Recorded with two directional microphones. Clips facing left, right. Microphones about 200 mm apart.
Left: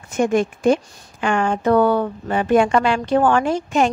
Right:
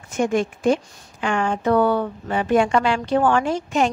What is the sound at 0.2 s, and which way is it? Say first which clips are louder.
A woman's voice: left 3 dB; 50° left (ahead or behind).